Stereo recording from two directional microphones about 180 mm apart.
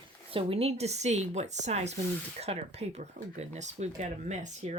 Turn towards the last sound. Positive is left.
turn(degrees=-40)  # may be behind; listen again after turning